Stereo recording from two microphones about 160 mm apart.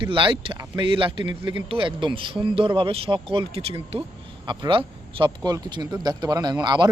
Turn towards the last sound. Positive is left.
turn(degrees=-25)  # may be behind; listen again after turning